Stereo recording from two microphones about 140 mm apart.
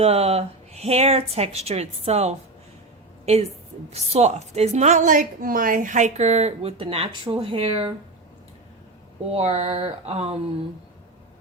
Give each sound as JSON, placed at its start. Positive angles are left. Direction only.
{"t": 0.0, "sound": "a woman's voice", "side_deg": -45}
{"t": 9.3, "sound": "a woman's voice", "side_deg": -45}